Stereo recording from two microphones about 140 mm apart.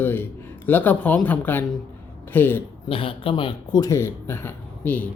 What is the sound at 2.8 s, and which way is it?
Speech, 40° left (ahead or behind).